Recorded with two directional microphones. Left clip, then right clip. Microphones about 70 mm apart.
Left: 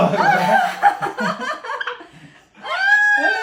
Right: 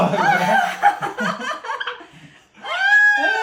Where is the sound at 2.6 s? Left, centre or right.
Right.